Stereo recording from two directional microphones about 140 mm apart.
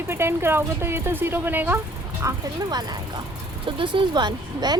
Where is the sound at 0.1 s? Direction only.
15° right (ahead or behind).